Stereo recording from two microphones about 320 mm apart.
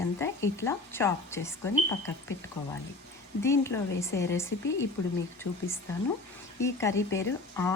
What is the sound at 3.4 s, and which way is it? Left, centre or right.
Speech, centre.